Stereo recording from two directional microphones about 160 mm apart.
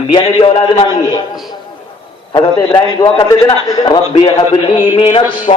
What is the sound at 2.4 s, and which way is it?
A man's voice, 30° left (ahead or behind).